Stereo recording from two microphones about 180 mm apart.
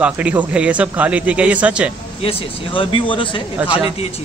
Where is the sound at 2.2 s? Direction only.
30° left (ahead or behind).